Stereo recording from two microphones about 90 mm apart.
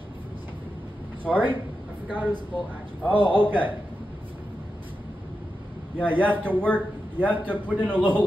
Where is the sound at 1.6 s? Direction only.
20° right (ahead or behind).